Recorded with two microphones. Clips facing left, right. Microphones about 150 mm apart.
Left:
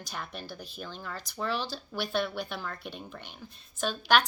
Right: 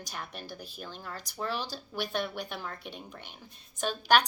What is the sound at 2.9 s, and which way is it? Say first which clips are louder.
Speech: left 2 dB; 15° right (ahead or behind).